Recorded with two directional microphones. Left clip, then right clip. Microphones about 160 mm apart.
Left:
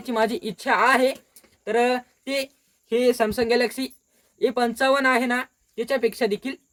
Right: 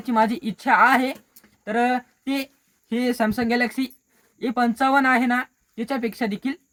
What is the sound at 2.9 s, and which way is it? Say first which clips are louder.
Speech: left 3 dB; 20° left (ahead or behind).